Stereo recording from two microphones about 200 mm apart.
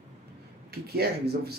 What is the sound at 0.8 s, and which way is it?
Speech, 50° right (ahead or behind).